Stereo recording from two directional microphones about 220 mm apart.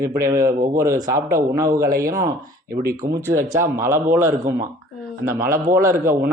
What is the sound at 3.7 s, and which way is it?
Speech, 10° right (ahead or behind).